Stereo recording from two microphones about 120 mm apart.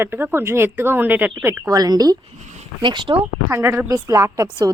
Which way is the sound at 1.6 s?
30° right (ahead or behind).